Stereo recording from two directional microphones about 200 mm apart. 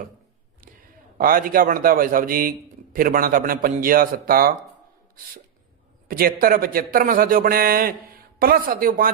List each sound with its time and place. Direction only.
1.2 s a man's voice: 45° right (ahead or behind)
6.1 s a man's voice: 45° right (ahead or behind)